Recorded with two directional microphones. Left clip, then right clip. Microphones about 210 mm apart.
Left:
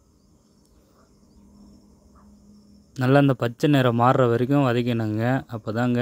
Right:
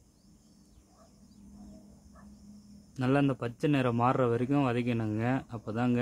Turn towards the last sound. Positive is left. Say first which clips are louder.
# left 7 dB
turn(degrees=30)  # may be behind; listen again after turning